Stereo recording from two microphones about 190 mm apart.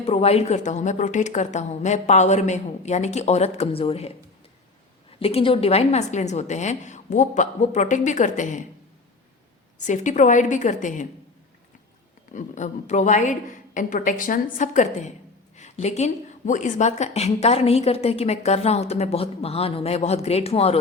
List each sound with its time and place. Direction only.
0.0 s a woman's voice: 35° left (ahead or behind)
5.2 s a woman's voice: 30° left (ahead or behind)
9.7 s a woman's voice: 40° left (ahead or behind)
12.3 s a woman's voice: 40° left (ahead or behind)